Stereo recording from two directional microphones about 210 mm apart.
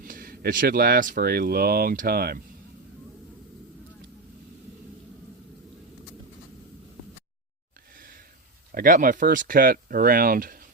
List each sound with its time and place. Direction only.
0.0 s speech: 45° right (ahead or behind)
8.7 s speech: 40° right (ahead or behind)